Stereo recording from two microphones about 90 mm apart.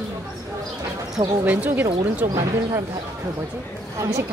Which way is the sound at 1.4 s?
20° right (ahead or behind).